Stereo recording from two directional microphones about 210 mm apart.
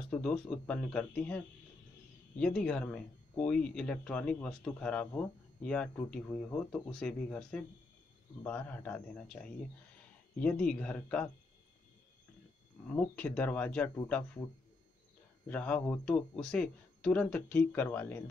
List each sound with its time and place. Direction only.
0.1 s speech: 5° left (ahead or behind)
12.8 s speech: 5° left (ahead or behind)
15.4 s speech: 5° left (ahead or behind)